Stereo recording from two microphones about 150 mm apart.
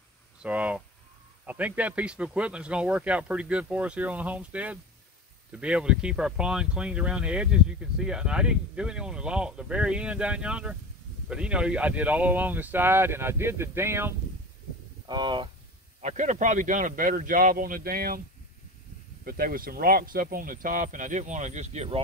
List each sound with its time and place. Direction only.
0.4 s speech: 10° right (ahead or behind)
15.0 s speech: 30° right (ahead or behind)
16.0 s speech: 50° right (ahead or behind); by 18.2 s 80° right
19.2 s speech: 75° right (ahead or behind); by 22.0 s 45° right (ahead or behind)